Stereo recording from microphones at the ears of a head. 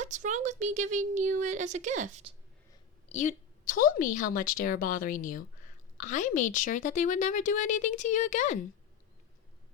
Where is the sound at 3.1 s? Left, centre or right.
Left.